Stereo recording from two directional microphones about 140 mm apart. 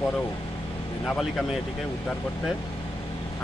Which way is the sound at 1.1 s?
Centre (ahead or behind).